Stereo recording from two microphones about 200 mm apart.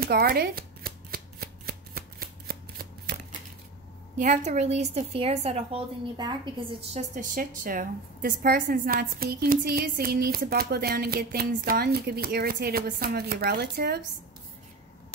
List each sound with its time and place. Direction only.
0.0 s shuffling cards: 50° right (ahead or behind)
4.2 s a woman's voice: 35° right (ahead or behind)
6.1 s a woman's voice: 20° right (ahead or behind)
6.9 s a woman's voice: 35° right (ahead or behind)